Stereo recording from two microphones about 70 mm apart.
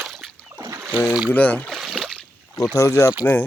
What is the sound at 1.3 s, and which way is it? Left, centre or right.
Speech, left.